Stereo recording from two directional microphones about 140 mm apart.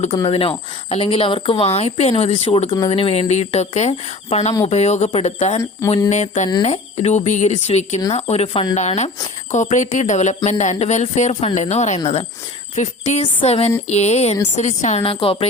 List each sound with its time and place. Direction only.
0.1 s speech: 40° left (ahead or behind); by 13.2 s 55° left (ahead or behind)
13.4 s speech: 45° left (ahead or behind)